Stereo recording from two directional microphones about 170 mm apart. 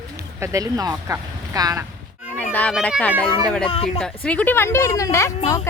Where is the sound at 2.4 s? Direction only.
10° left (ahead or behind).